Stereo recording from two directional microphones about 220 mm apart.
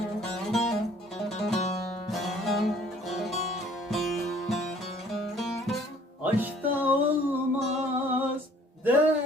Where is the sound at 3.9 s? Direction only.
Centre (ahead or behind).